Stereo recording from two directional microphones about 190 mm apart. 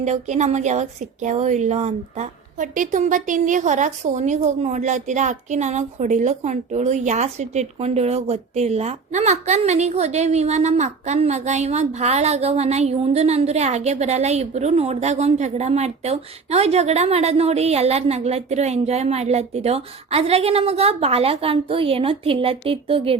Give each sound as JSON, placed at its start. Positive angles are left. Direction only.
{"t": 0.0, "sound": "a woman's voice", "side_deg": -40}